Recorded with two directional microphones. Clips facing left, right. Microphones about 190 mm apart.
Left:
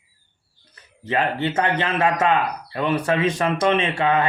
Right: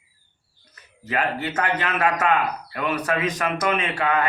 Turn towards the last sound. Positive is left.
turn(degrees=25)  # may be behind; listen again after turning